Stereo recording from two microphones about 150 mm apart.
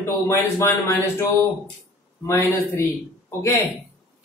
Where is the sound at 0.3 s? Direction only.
15° left (ahead or behind).